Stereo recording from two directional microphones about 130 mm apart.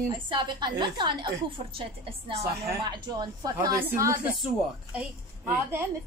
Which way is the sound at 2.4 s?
20° right (ahead or behind).